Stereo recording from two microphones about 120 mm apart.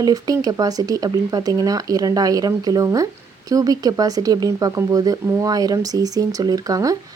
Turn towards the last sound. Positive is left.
turn(degrees=-30)  # may be behind; listen again after turning